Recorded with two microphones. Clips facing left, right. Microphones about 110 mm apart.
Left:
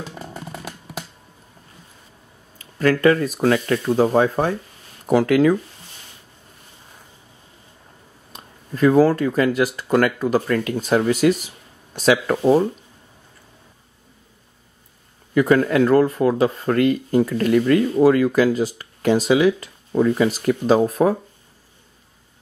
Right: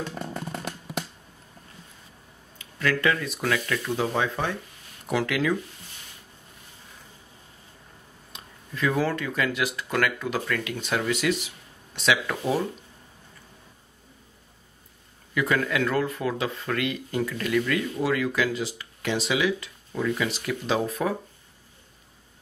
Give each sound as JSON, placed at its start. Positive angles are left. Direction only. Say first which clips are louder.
{"t": 2.6, "sound": "speech", "louder": "left 9 dB", "side_deg": 40}
{"t": 8.3, "sound": "speech", "louder": "left 8 dB", "side_deg": 40}
{"t": 15.3, "sound": "speech", "louder": "left 9 dB", "side_deg": 40}